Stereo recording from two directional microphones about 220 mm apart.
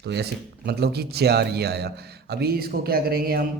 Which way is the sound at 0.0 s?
50° right (ahead or behind).